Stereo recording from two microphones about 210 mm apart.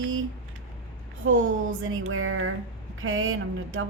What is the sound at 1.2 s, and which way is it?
Speech, 70° right (ahead or behind).